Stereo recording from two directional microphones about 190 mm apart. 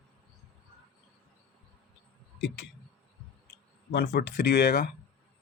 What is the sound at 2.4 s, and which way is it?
Speech, 70° left (ahead or behind).